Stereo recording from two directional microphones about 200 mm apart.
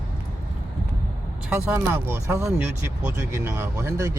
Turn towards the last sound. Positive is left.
turn(degrees=-15)  # may be behind; listen again after turning